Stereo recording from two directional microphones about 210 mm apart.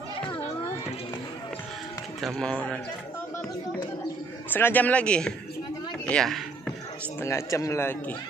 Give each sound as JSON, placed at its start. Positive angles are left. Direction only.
{"t": 2.2, "sound": "speech", "side_deg": 5}
{"t": 4.5, "sound": "speech", "side_deg": 10}
{"t": 7.2, "sound": "speech", "side_deg": 15}